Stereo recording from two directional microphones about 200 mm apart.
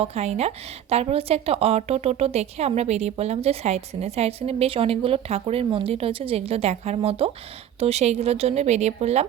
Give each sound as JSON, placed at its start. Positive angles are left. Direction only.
{"t": 0.0, "sound": "a woman's voice", "side_deg": -30}